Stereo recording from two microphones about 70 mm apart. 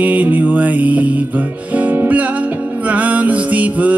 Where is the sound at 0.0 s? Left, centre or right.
Right.